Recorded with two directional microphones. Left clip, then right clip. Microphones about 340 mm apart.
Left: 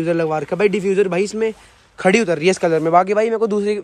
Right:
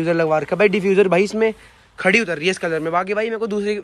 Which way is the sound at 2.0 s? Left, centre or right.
Centre.